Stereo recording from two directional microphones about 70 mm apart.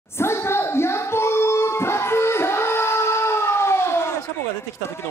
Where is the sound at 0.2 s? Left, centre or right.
Left.